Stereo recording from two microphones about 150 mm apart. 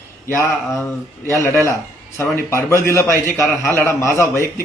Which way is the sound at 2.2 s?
20° left (ahead or behind).